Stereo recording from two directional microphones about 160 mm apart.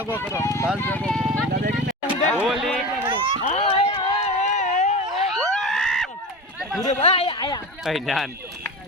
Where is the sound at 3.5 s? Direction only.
40° left (ahead or behind).